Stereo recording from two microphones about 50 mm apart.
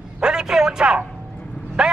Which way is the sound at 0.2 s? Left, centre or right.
Centre.